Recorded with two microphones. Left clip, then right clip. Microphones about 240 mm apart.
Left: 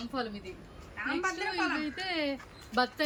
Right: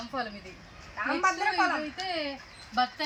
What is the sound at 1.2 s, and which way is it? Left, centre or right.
Speech, centre.